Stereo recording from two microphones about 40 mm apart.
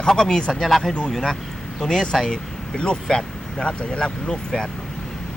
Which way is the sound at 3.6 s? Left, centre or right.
Left.